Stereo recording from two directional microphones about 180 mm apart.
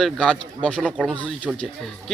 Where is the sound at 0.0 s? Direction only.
5° left (ahead or behind).